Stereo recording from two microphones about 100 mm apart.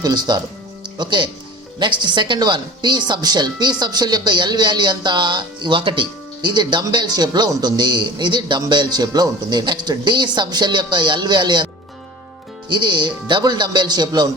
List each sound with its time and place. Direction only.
0.0 s speech: 45° right (ahead or behind)